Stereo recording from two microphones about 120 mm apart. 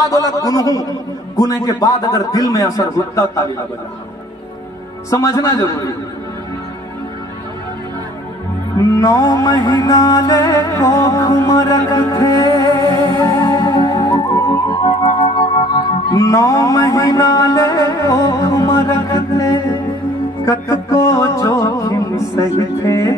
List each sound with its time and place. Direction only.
0.3 s music: 30° left (ahead or behind)
1.3 s a man's voice: 30° left (ahead or behind)
5.1 s music: 25° left (ahead or behind)
8.7 s music: 25° left (ahead or behind)
12.7 s music: 40° right (ahead or behind)
13.0 s music: 35° left (ahead or behind)
15.7 s music: 30° left (ahead or behind)